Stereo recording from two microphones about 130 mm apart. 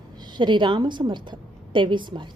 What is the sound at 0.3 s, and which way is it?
A woman's voice, 35° right (ahead or behind).